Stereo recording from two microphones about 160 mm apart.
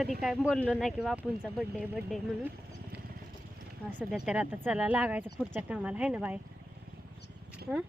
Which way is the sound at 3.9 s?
5° right (ahead or behind).